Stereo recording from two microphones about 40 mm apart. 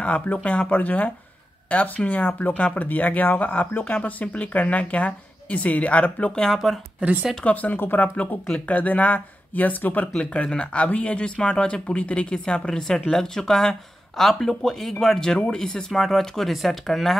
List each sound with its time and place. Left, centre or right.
0.0 s speech: left
6.3 s speech: centre
7.5 s speech: left
10.3 s speech: left; by 17.2 s centre